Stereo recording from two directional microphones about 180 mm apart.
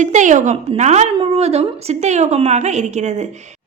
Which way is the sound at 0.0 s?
45° right (ahead or behind).